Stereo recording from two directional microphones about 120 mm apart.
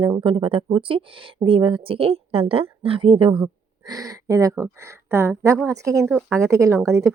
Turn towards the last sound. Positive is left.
turn(degrees=-25)  # may be behind; listen again after turning